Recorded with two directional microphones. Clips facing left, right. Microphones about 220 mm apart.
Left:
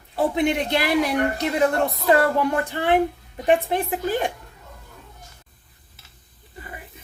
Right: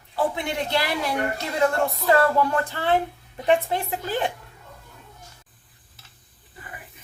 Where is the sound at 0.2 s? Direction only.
20° left (ahead or behind).